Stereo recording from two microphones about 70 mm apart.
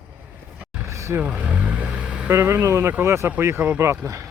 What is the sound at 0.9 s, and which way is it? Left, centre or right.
Vehicle, right.